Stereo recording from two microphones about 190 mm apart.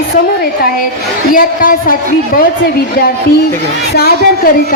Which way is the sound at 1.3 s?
50° left (ahead or behind).